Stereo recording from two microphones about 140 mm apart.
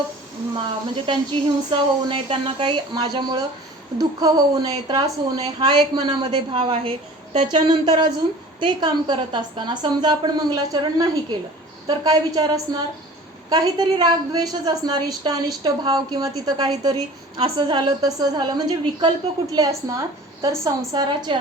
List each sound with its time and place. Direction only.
1.0 s a woman's voice: 35° right (ahead or behind)
13.5 s a woman's voice: 30° right (ahead or behind)